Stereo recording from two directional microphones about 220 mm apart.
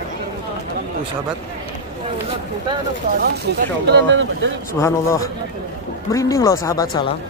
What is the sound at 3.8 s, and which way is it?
Speech, 55° right (ahead or behind).